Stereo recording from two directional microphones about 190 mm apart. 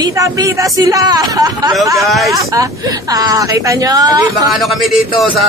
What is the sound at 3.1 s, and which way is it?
Speech, 20° right (ahead or behind).